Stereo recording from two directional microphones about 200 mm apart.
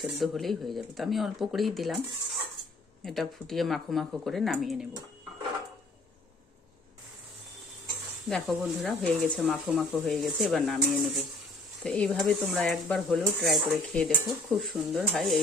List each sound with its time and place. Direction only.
0.0 s speech: centre (ahead or behind)
3.0 s speech: centre (ahead or behind)
8.3 s speech: centre (ahead or behind)